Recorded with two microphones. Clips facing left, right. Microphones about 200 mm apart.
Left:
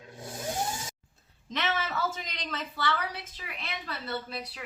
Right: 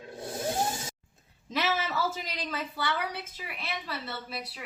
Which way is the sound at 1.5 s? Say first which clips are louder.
Right 2 dB; 5° right (ahead or behind).